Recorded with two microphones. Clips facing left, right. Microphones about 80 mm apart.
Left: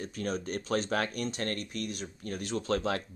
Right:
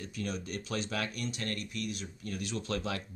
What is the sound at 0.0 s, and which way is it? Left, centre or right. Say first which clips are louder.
Speech: left 4 dB; left.